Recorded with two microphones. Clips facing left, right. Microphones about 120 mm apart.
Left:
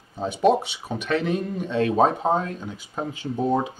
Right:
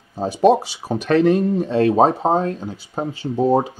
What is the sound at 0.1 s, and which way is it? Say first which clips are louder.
Speech: right 5 dB; 35° right (ahead or behind).